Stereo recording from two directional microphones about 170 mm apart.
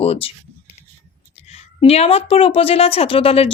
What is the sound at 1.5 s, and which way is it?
A woman's voice, 35° left (ahead or behind).